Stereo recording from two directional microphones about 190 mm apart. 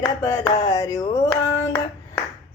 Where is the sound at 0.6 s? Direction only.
15° left (ahead or behind).